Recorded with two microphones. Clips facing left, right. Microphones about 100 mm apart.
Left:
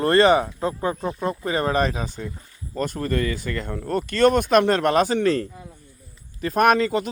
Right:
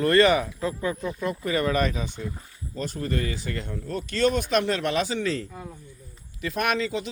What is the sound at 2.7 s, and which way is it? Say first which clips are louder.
Speech: left 5 dB; 50° left (ahead or behind).